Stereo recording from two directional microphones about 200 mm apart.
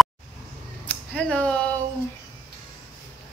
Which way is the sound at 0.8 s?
5° left (ahead or behind).